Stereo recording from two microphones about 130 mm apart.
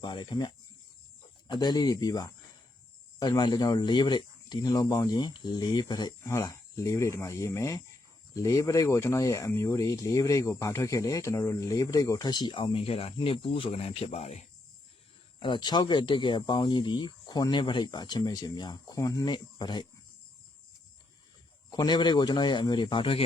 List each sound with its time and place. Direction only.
0.0 s speech: 35° left (ahead or behind); by 14.4 s 55° left (ahead or behind)
15.4 s speech: 35° left (ahead or behind)
21.7 s speech: 30° left (ahead or behind)